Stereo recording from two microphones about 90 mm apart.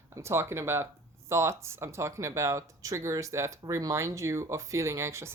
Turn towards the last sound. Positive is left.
turn(degrees=-30)  # may be behind; listen again after turning